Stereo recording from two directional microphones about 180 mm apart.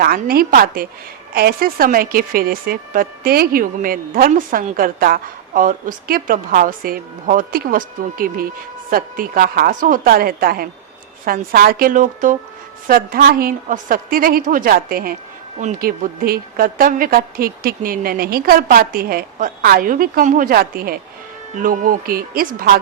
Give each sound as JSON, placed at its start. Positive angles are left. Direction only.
{"t": 0.0, "sound": "a woman's voice", "side_deg": -55}